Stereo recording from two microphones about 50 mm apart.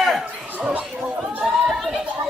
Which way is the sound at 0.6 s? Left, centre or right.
Right.